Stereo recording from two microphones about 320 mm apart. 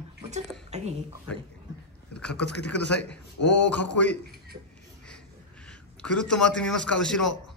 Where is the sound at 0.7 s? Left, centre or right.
Right.